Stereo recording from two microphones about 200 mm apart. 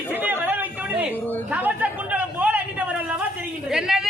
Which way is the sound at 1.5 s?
10° right (ahead or behind).